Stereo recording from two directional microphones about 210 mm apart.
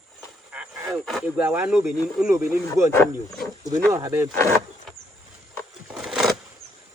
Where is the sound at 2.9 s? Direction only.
5° left (ahead or behind).